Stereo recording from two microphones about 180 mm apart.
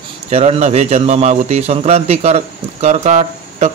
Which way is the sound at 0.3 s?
35° right (ahead or behind).